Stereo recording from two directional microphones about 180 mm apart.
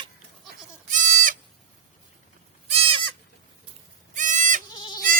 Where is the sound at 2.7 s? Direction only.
30° right (ahead or behind).